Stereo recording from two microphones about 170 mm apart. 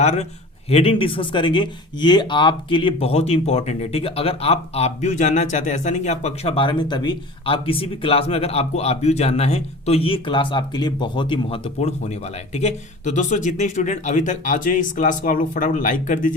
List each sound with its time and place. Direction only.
0.0 s speech: 40° left (ahead or behind)